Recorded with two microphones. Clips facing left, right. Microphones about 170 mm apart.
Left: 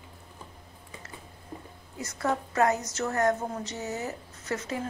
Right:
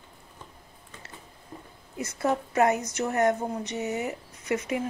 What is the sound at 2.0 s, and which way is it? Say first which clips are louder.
A woman's voice: right 3 dB; 20° right (ahead or behind).